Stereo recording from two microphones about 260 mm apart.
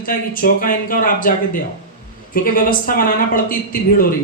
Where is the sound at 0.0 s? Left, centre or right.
Left.